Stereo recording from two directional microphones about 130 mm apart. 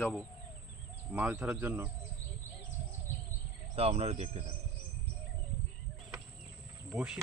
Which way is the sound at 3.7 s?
50° right (ahead or behind).